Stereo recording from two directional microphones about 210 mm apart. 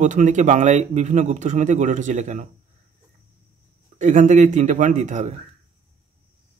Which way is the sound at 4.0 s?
35° right (ahead or behind).